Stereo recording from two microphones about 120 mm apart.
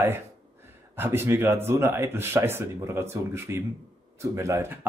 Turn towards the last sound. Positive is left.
turn(degrees=-25)  # may be behind; listen again after turning